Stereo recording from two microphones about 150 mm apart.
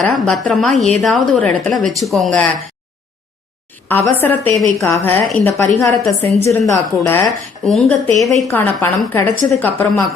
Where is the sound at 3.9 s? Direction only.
15° left (ahead or behind).